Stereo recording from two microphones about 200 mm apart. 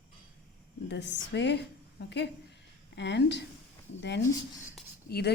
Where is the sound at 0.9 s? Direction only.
60° left (ahead or behind).